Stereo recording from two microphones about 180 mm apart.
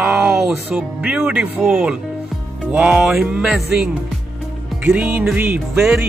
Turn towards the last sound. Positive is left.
turn(degrees=-5)  # may be behind; listen again after turning